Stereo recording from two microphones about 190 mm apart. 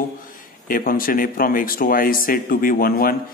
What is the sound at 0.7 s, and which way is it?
A man's voice, 50° left (ahead or behind).